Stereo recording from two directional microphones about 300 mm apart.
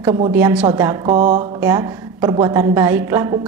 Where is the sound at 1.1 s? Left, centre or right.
Right.